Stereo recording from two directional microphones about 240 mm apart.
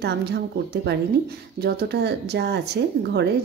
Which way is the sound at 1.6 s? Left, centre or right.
Right.